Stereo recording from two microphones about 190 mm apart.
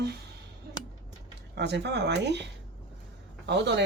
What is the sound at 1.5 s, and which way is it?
Speech, 60° right (ahead or behind).